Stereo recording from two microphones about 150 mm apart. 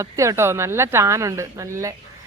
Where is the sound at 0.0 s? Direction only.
20° right (ahead or behind).